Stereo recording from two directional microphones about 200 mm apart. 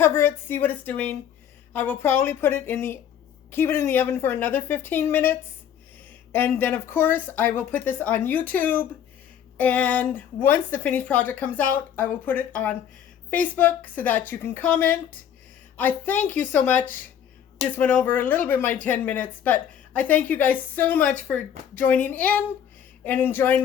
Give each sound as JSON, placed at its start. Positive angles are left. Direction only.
{"t": 0.0, "sound": "speech", "side_deg": 10}